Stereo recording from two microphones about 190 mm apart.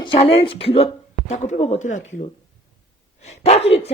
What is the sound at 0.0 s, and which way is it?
Speech, 30° left (ahead or behind).